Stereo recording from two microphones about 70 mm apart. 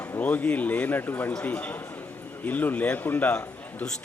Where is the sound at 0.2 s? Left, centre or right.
Left.